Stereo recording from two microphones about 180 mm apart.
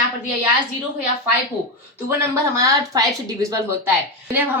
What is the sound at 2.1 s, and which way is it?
A woman's voice, 15° right (ahead or behind).